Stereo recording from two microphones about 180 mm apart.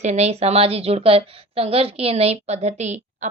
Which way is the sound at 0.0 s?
40° right (ahead or behind).